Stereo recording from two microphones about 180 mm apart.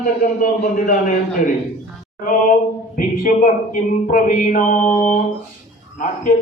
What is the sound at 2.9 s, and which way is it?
Speech, 45° left (ahead or behind).